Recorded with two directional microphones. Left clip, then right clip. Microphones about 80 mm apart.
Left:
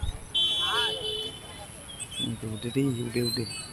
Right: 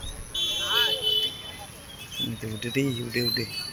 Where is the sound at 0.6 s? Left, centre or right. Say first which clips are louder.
Right 3 dB; right.